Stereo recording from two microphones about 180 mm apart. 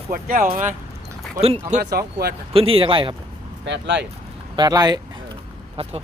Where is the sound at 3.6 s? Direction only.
80° right.